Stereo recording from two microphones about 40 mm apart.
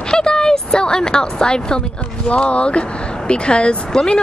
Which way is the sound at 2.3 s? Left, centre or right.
Left.